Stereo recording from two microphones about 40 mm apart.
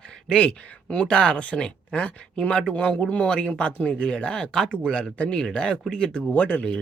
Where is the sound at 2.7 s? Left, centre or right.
Left.